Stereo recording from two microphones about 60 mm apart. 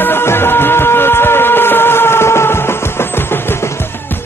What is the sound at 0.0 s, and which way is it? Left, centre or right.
Music, left.